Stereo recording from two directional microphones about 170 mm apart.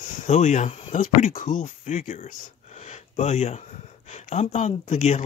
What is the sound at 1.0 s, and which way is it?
Speech, 50° left (ahead or behind).